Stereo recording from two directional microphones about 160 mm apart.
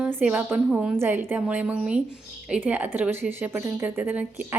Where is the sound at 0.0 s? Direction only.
10° right (ahead or behind).